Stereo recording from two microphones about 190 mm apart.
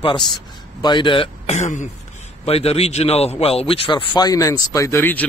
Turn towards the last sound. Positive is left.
turn(degrees=10)  # may be behind; listen again after turning